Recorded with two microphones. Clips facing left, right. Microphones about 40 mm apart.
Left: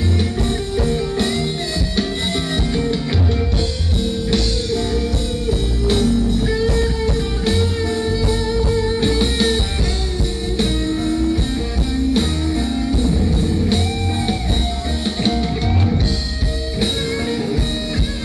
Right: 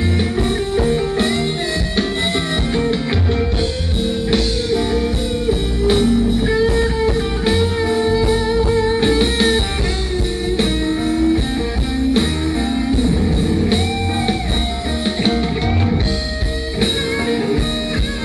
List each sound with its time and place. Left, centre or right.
0.4 s music: right
2.7 s music: right
4.3 s music: centre
10.6 s music: right
12.9 s music: right
16.8 s music: right